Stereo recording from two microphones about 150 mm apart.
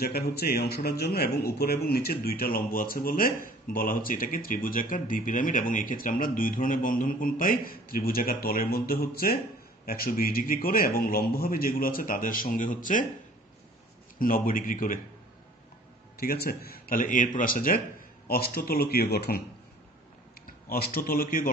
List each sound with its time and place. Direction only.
0.0 s speech: 90° left; by 13.0 s 60° left (ahead or behind)
14.1 s speech: 70° left (ahead or behind)
16.2 s speech: 90° left
20.4 s speech: 80° left